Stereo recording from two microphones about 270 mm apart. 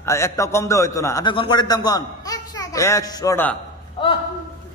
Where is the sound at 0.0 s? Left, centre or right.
Centre.